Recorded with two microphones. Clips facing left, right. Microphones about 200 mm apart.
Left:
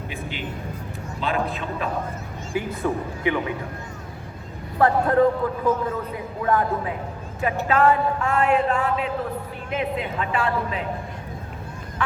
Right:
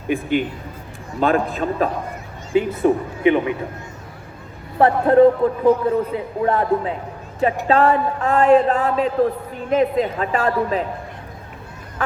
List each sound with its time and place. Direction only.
0.1 s a man's voice: 50° right (ahead or behind)
2.5 s a woman's voice: 20° right (ahead or behind)
4.8 s a woman's voice: 25° right (ahead or behind); by 10.8 s 40° right (ahead or behind)